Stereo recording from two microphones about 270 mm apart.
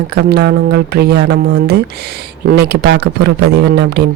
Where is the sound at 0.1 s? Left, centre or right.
Right.